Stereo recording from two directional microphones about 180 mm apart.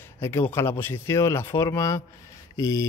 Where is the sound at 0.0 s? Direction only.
15° left (ahead or behind).